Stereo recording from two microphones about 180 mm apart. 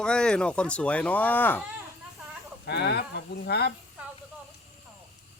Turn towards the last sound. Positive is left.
turn(degrees=65)  # may be behind; listen again after turning